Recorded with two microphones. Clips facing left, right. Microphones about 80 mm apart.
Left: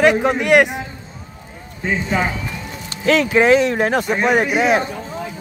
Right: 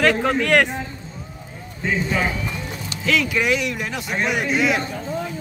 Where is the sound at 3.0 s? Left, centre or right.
Left.